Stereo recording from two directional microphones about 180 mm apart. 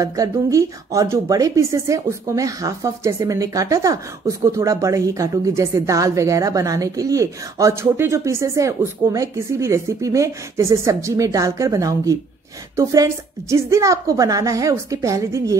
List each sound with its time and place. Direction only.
0.0 s a woman's voice: 20° right (ahead or behind)